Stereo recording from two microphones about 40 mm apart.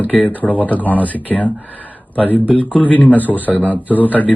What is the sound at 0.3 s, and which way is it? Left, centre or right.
A man's voice, left.